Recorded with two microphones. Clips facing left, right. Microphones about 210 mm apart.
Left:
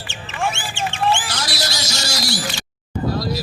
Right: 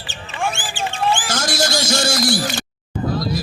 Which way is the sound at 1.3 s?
50° right (ahead or behind).